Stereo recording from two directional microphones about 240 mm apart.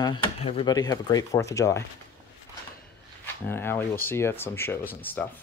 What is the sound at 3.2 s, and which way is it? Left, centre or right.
Speech, centre.